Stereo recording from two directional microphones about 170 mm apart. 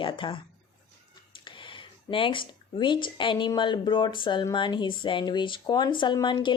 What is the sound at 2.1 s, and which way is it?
Speech, 30° left (ahead or behind).